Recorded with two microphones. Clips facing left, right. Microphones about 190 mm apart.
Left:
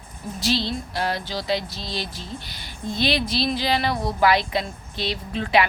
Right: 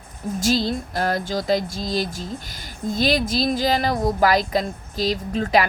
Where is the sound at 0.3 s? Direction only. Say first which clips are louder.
Right 3 dB; 45° right (ahead or behind).